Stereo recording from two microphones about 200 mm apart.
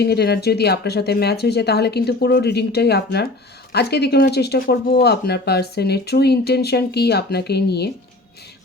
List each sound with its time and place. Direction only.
0.0 s speech: 55° left (ahead or behind)